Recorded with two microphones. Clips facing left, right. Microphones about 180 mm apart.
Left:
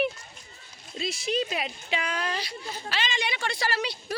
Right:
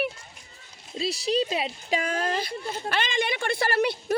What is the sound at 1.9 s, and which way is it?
A woman's voice, 45° right (ahead or behind).